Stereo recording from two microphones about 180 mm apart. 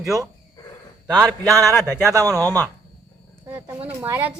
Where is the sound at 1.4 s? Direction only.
20° right (ahead or behind).